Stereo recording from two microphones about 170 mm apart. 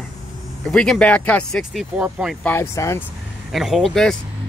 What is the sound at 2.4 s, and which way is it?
Speech, 15° left (ahead or behind).